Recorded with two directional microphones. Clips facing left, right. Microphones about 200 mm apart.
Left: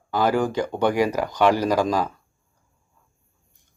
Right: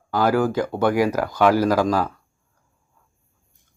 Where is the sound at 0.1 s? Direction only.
10° right (ahead or behind).